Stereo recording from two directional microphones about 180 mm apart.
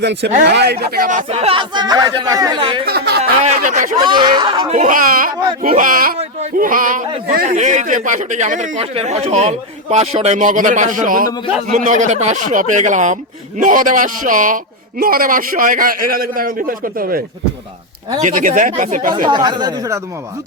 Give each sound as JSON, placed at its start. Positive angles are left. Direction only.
{"t": 0.0, "sound": "speech", "side_deg": -70}
{"t": 2.8, "sound": "a sound", "side_deg": -65}
{"t": 3.4, "sound": "speech", "side_deg": -40}
{"t": 4.0, "sound": "speech", "side_deg": -25}
{"t": 4.7, "sound": "speech", "side_deg": -45}
{"t": 6.1, "sound": "a sound", "side_deg": -45}
{"t": 7.3, "sound": "speech", "side_deg": -45}
{"t": 19.1, "sound": "speech", "side_deg": -25}